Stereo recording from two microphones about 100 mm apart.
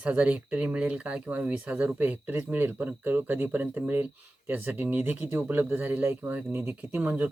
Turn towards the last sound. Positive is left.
turn(degrees=-15)  # may be behind; listen again after turning